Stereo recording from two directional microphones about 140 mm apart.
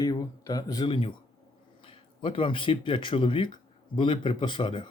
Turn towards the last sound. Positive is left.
turn(degrees=35)  # may be behind; listen again after turning